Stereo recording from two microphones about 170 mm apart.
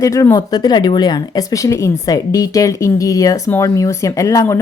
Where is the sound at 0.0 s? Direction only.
20° left (ahead or behind).